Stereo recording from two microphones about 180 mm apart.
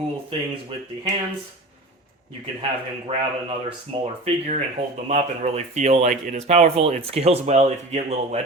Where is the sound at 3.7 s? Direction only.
35° right (ahead or behind).